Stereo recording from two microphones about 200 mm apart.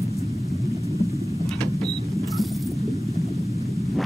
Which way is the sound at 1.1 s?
30° right (ahead or behind).